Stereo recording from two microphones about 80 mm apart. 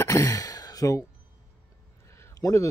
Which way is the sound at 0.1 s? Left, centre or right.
Left.